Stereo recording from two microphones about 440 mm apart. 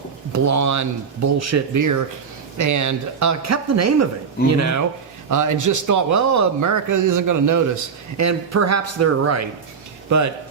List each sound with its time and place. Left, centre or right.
0.3 s speech: right